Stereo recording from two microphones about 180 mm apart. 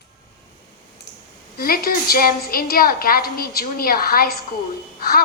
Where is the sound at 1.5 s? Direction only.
55° left (ahead or behind).